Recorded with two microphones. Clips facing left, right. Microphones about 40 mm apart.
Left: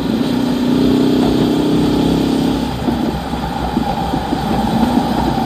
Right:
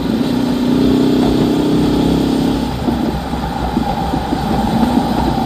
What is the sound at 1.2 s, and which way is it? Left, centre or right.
Vehicle, left.